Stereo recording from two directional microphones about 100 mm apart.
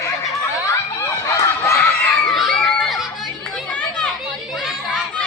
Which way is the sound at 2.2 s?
Centre (ahead or behind).